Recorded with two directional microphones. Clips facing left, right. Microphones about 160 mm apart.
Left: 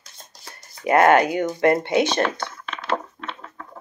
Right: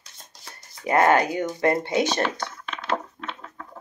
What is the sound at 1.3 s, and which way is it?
Speech, 30° right (ahead or behind).